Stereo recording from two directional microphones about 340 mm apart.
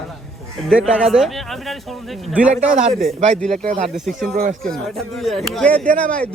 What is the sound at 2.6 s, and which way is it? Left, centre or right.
Speech, centre.